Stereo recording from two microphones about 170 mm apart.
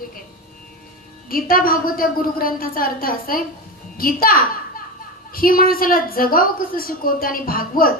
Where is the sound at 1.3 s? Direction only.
55° left (ahead or behind).